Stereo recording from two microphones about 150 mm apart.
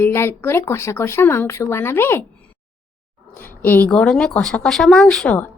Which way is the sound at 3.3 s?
15° left (ahead or behind).